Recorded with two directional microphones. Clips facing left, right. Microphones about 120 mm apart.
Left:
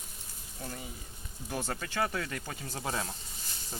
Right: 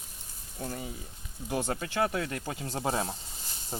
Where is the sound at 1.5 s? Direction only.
15° right (ahead or behind).